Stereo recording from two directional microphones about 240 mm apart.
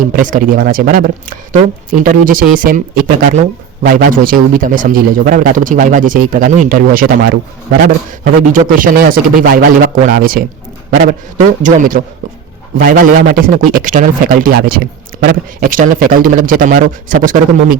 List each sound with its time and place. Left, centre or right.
0.2 s a man's voice: right